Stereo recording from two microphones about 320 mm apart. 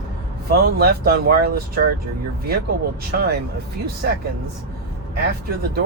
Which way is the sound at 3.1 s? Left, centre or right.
Right.